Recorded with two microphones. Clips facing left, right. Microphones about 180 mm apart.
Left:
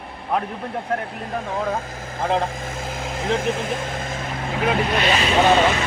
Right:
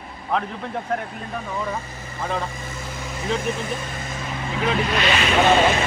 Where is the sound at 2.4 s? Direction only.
50° left (ahead or behind).